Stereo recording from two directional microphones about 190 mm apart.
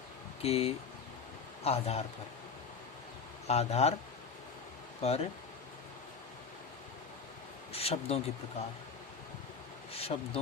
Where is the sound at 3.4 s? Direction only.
35° left (ahead or behind).